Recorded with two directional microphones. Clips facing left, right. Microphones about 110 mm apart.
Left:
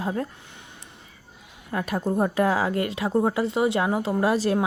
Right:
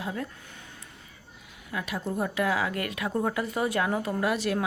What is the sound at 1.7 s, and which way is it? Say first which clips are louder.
A woman's voice: left 6 dB; 45° left (ahead or behind).